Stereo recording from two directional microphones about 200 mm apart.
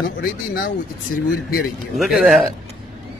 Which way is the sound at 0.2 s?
45° left (ahead or behind).